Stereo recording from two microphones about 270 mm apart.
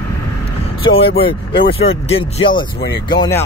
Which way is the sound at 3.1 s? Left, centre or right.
Centre.